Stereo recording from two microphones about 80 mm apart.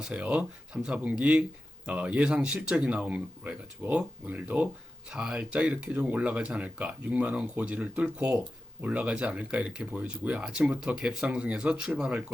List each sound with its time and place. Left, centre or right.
0.1 s speech: centre